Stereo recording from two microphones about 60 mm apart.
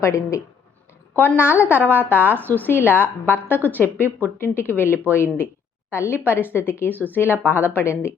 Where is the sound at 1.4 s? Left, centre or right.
Left.